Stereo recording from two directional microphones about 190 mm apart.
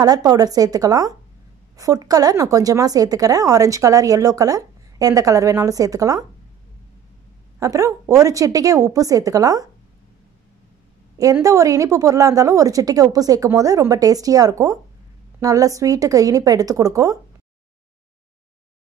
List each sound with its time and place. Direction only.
0.0 s a woman's voice: 20° right (ahead or behind)
7.5 s speech: 15° right (ahead or behind)
11.1 s speech: 15° right (ahead or behind)